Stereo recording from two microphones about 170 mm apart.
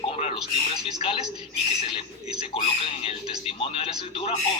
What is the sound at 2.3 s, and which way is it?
Speech, 35° left (ahead or behind).